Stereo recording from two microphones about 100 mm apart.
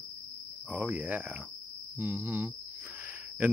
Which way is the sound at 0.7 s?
15° right (ahead or behind).